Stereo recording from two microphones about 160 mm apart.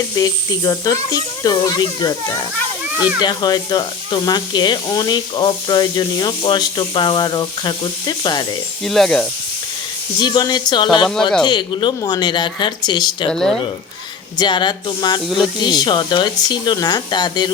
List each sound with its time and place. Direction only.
0.2 s speech: 20° left (ahead or behind)
2.9 s speech: 10° right (ahead or behind)
3.2 s speech: 25° left (ahead or behind)
8.8 s speech: 5° left (ahead or behind)
10.2 s speech: 25° left (ahead or behind)
13.3 s speech: 5° left (ahead or behind)
14.3 s speech: 30° left (ahead or behind)